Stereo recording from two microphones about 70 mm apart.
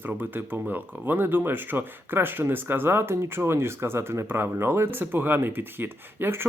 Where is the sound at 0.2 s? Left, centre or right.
Right.